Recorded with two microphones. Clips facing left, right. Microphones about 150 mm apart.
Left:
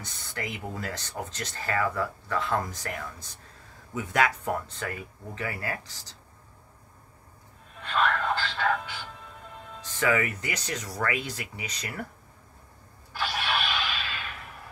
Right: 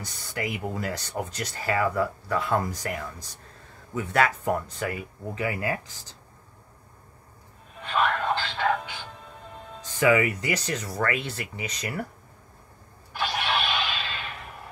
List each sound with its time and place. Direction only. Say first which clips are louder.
0.3 s speech: right 5 dB; 10° right (ahead or behind)
7.8 s speech: right 1 dB; 15° right (ahead or behind); by 11.6 s 5° left (ahead or behind)
11.8 s speech: right 5 dB; 10° right (ahead or behind)
13.1 s a sound: right 2 dB; 20° right (ahead or behind)